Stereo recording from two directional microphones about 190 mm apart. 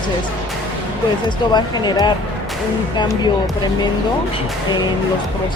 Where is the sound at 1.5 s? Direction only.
20° left (ahead or behind).